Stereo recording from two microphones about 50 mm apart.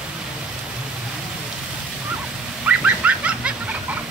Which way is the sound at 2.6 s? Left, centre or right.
Right.